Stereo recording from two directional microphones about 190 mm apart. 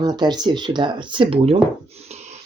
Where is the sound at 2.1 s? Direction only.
35° right (ahead or behind).